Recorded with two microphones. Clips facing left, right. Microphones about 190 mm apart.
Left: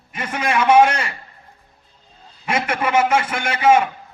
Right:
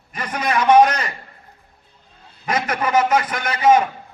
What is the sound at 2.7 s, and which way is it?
Speech, 25° left (ahead or behind).